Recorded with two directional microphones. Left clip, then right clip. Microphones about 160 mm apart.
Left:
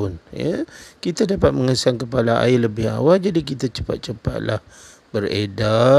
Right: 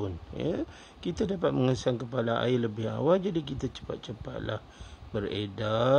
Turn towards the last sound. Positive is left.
turn(degrees=30)  # may be behind; listen again after turning